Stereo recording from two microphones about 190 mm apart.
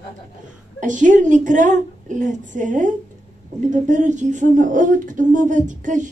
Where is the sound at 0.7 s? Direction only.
40° right (ahead or behind).